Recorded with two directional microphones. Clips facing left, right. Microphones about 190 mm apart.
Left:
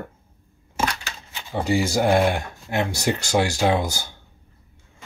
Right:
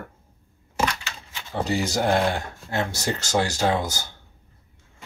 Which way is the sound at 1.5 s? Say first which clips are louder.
Left 3 dB; 10° left (ahead or behind).